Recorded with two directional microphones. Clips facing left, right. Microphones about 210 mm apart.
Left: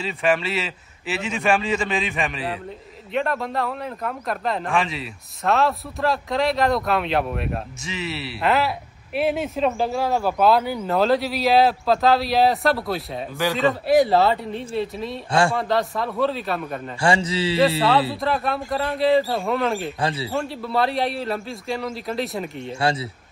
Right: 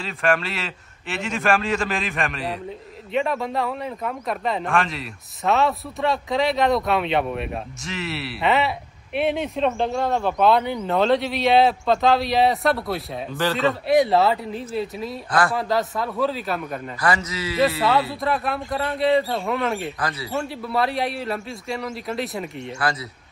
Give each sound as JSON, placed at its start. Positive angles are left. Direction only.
{"t": 0.0, "sound": "speech", "side_deg": 0}
{"t": 17.0, "sound": "a man's voice", "side_deg": 30}
{"t": 18.2, "sound": "speech", "side_deg": 0}
{"t": 20.0, "sound": "a man's voice", "side_deg": 30}
{"t": 20.3, "sound": "speech", "side_deg": 0}
{"t": 22.8, "sound": "a man's voice", "side_deg": 30}